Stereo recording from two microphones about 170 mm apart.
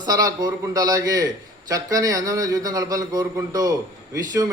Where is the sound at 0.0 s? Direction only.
20° right (ahead or behind).